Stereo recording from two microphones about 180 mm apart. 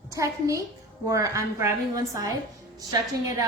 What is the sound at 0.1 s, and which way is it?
A woman's voice, 15° right (ahead or behind).